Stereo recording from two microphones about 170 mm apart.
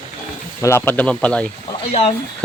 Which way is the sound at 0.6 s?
15° left (ahead or behind).